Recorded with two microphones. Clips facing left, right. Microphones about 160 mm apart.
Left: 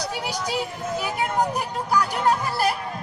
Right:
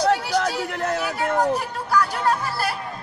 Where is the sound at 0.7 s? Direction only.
75° right (ahead or behind).